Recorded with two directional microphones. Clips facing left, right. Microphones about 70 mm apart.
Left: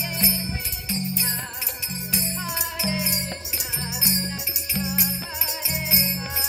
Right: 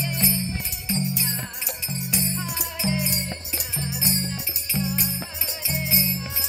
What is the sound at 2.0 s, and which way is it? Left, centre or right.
Music, centre.